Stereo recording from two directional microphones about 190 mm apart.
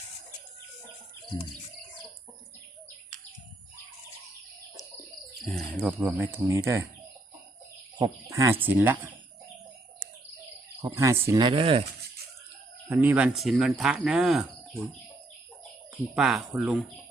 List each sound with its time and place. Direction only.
5.5 s speech: 5° left (ahead or behind)
6.0 s speech: 5° right (ahead or behind)
7.9 s speech: 20° right (ahead or behind)
10.8 s speech: 15° right (ahead or behind)
12.9 s speech: 10° right (ahead or behind)
16.1 s speech: 5° right (ahead or behind)